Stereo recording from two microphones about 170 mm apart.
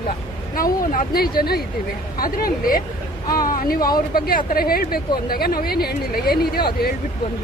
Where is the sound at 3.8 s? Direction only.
25° left (ahead or behind).